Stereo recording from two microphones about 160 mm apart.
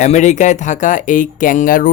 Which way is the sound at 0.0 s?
45° left (ahead or behind).